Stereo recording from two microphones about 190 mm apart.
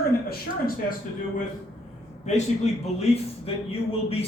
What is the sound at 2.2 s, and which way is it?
Speech, 35° left (ahead or behind).